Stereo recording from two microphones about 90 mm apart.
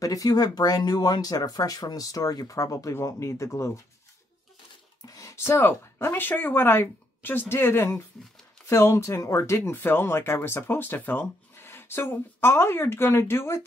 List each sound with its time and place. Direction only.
0.0 s speech: 40° left (ahead or behind)
5.0 s speech: 40° left (ahead or behind)